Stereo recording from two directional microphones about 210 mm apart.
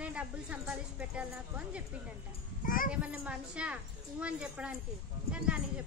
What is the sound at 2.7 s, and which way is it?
Speech, 40° left (ahead or behind).